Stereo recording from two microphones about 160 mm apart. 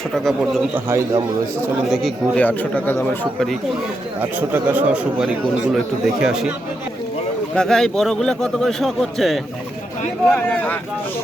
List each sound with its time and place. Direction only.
0.9 s a man's voice: 20° right (ahead or behind)
1.9 s speech: centre (ahead or behind)
4.2 s speech: 10° right (ahead or behind)
7.5 s a man's voice: 5° left (ahead or behind)